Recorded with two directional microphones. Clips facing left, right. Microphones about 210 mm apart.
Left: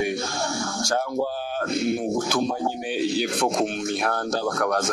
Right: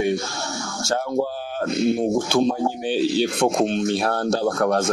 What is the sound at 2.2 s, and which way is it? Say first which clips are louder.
Speech: right 4 dB; 30° right (ahead or behind).